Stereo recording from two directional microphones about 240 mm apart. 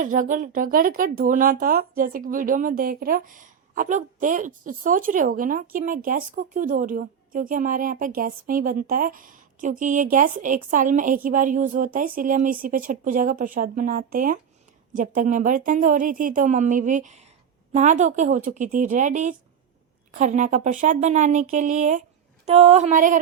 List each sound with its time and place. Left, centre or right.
0.0 s speech: right